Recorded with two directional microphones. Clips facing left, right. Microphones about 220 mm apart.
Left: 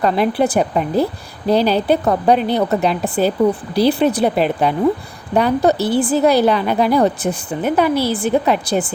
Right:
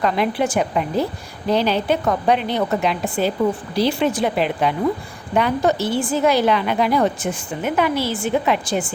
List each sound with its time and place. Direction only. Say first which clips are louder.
0.0 s a woman's voice: left 4 dB; 35° left (ahead or behind)